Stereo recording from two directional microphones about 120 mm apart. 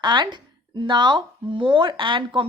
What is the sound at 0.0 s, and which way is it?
Speech, 40° right (ahead or behind).